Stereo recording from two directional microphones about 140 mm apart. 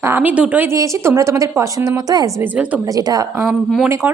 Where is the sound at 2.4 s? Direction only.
10° right (ahead or behind).